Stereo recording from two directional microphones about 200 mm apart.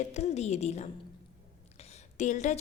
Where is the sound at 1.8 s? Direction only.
35° left (ahead or behind).